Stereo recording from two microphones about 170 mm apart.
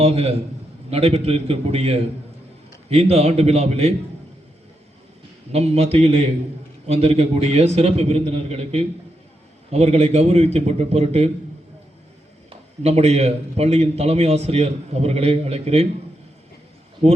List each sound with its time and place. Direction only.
0.0 s a man's voice: 35° right (ahead or behind)
5.5 s a man's voice: 35° right (ahead or behind)
12.5 s a man's voice: 35° right (ahead or behind)